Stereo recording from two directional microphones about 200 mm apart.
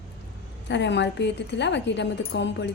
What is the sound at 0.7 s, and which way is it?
A woman's voice, 60° left (ahead or behind).